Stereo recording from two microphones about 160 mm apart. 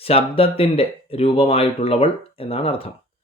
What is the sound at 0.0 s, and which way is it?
Speech, 35° left (ahead or behind).